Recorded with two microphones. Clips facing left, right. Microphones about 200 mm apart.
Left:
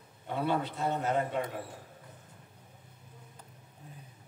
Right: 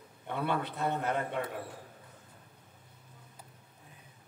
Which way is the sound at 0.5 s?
55° right (ahead or behind).